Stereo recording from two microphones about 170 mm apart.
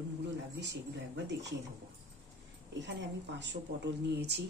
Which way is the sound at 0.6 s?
90° right.